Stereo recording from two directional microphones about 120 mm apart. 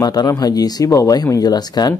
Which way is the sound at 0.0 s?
35° left (ahead or behind).